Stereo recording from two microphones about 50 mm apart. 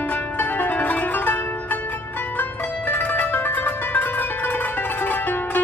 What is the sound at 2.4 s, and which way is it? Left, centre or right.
Music, left.